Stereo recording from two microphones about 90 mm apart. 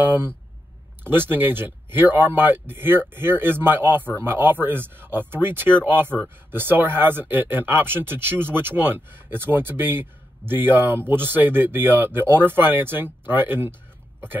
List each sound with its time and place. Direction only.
0.0 s speech: 25° right (ahead or behind)